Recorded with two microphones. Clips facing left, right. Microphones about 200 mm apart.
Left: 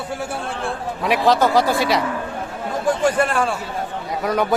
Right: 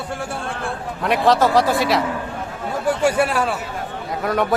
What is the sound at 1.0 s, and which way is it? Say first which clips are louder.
A man's voice: even; centre (ahead or behind).